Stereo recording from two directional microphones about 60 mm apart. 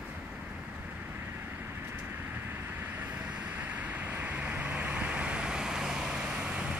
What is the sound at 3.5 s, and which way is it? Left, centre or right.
Vehicle, right.